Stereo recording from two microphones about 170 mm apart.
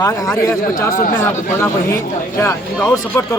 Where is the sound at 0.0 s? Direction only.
20° left (ahead or behind).